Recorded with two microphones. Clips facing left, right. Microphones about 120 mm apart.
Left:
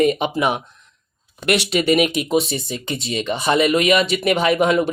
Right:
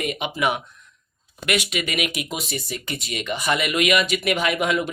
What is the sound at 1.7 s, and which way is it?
Speech, 35° left (ahead or behind).